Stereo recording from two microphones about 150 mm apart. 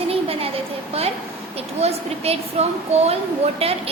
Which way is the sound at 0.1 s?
40° right (ahead or behind).